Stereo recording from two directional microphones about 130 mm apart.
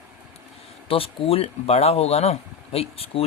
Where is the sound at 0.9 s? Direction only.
45° left (ahead or behind).